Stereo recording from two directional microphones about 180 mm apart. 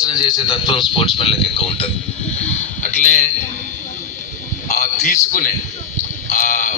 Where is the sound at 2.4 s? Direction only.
40° left (ahead or behind).